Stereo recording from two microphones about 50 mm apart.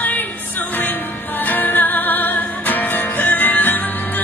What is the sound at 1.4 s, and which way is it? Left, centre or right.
Music, left.